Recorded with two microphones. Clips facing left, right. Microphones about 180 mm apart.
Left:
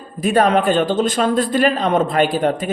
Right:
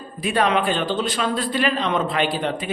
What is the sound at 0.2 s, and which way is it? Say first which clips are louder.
Speech: left 5 dB; 45° left (ahead or behind).